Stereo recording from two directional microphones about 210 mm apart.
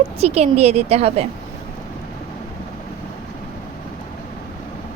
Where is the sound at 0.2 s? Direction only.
30° right (ahead or behind).